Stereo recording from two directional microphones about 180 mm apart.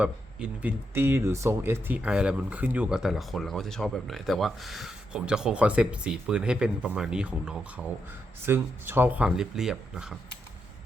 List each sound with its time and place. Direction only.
0.0 s speech: 5° right (ahead or behind)